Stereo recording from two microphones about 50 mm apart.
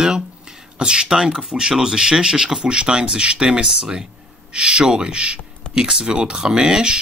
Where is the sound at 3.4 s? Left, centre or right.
Centre.